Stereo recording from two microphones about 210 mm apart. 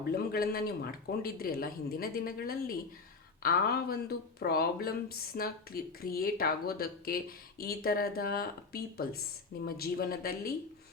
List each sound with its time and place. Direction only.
0.1 s speech: 45° left (ahead or behind)